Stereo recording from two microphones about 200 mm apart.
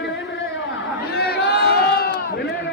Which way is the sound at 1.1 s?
50° left (ahead or behind).